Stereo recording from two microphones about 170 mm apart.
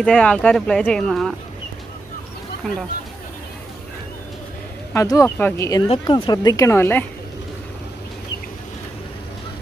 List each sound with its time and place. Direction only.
0.0 s speech: 5° left (ahead or behind)
4.9 s speech: 20° left (ahead or behind)
5.9 s speech: 30° left (ahead or behind); by 7.1 s 10° left (ahead or behind)